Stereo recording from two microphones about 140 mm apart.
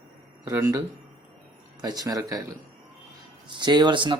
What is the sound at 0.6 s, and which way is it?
Speech, 25° right (ahead or behind).